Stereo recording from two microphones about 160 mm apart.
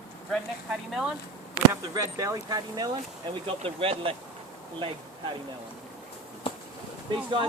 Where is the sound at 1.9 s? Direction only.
20° right (ahead or behind).